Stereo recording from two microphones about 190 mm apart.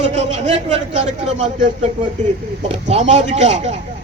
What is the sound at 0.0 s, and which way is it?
A man's voice, 35° right (ahead or behind).